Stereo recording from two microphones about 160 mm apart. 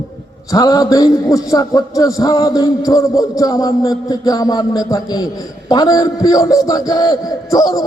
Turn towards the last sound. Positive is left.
turn(degrees=25)  # may be behind; listen again after turning